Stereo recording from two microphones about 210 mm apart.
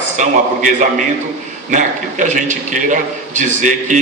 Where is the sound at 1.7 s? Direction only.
35° right (ahead or behind).